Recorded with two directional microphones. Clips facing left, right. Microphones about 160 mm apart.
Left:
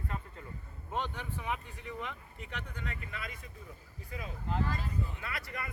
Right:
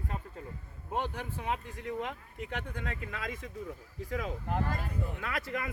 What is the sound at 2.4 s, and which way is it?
Speech, 90° right.